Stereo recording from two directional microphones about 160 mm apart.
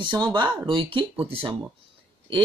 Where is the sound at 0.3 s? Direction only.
30° right (ahead or behind).